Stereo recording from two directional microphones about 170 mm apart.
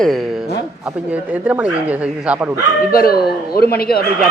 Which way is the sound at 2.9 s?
60° left (ahead or behind).